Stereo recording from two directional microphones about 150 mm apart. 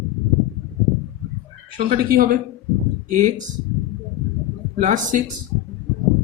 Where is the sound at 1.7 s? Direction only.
65° right (ahead or behind).